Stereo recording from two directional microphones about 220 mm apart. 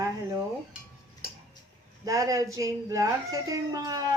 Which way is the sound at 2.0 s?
15° right (ahead or behind).